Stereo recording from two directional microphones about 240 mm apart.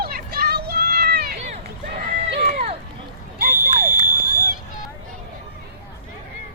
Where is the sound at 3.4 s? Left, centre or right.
Right.